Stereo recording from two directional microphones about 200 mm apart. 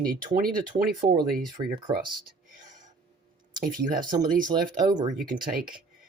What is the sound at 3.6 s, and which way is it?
Speech, 45° right (ahead or behind).